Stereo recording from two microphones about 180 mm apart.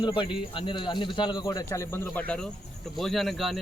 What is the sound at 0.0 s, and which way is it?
Speech, 25° left (ahead or behind).